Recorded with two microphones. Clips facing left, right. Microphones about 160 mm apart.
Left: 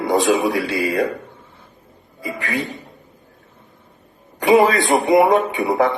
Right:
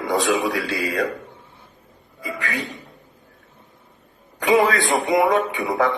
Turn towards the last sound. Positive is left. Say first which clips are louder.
# left 3 dB
turn(degrees=25)  # may be behind; listen again after turning